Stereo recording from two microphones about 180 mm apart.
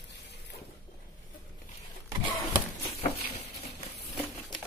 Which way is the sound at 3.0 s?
35° left (ahead or behind).